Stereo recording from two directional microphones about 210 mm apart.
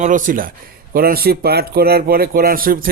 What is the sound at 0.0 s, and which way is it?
A man's voice, 40° right (ahead or behind).